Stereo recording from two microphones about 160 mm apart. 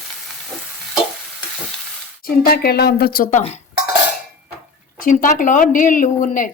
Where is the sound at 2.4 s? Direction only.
80° left; by 3.4 s 65° left (ahead or behind).